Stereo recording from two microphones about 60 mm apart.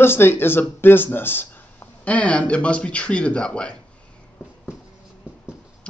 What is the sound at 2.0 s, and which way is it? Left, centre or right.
Speech, left.